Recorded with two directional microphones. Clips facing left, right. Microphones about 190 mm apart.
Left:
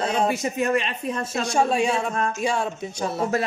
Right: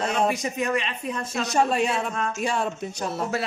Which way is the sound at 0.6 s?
35° left (ahead or behind).